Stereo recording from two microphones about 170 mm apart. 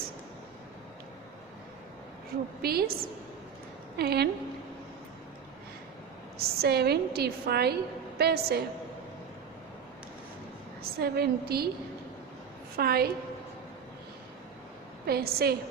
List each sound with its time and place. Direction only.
2.6 s a woman's voice: 65° right (ahead or behind)
6.4 s a woman's voice: 70° right (ahead or behind)
10.9 s a woman's voice: 65° right (ahead or behind)
12.7 s a woman's voice: 65° right (ahead or behind)
15.0 s a woman's voice: 65° right (ahead or behind)